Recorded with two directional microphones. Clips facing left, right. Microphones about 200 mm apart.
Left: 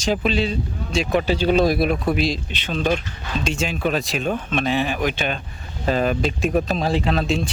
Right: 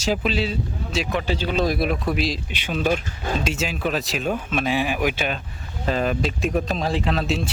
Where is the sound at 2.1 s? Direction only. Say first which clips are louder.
Left 3 dB; centre (ahead or behind).